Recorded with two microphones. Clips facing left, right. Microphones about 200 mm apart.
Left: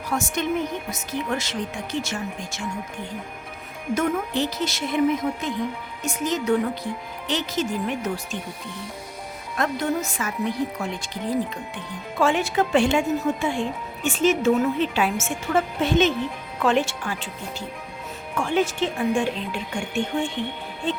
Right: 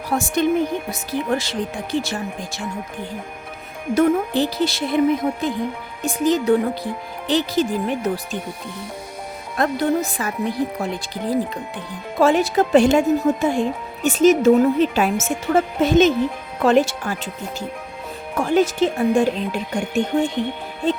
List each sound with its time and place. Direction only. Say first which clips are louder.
0.1 s speech: right 6 dB; 35° right (ahead or behind)
9.6 s speech: right 5 dB; 35° right (ahead or behind)
18.3 s speech: right 5 dB; 40° right (ahead or behind)